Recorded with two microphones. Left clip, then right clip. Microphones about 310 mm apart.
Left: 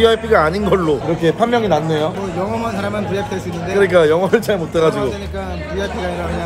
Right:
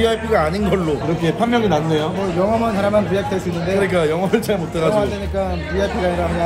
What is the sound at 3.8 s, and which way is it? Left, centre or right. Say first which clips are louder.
A man's voice: left 8 dB; centre.